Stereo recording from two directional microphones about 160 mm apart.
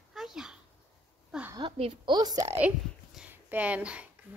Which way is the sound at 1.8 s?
35° right (ahead or behind).